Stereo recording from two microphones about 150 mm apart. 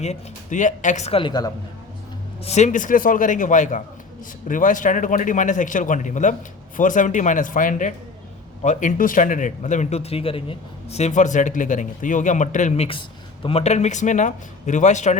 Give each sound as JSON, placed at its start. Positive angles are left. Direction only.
{"t": 0.0, "sound": "speech", "side_deg": 50}
{"t": 1.2, "sound": "a woman's voice", "side_deg": 25}
{"t": 2.4, "sound": "speech", "side_deg": 50}